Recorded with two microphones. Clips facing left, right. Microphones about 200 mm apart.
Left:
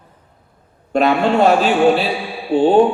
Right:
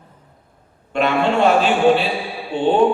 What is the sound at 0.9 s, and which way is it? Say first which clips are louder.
A man's voice: left 3 dB; 40° left (ahead or behind).